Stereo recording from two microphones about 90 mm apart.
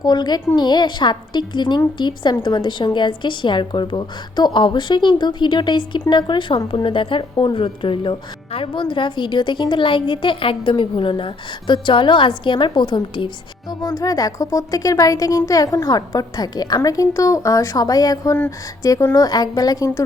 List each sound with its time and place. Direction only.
0.0 s a woman's voice: 50° left (ahead or behind)
6.8 s a woman's voice: 70° left (ahead or behind)
13.8 s a woman's voice: 40° left (ahead or behind)